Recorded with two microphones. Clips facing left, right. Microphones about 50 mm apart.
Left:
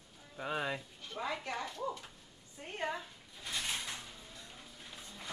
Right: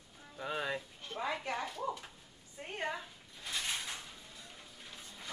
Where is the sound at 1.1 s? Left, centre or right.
Centre.